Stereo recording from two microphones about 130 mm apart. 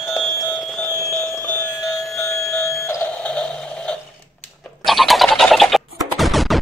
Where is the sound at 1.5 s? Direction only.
20° left (ahead or behind).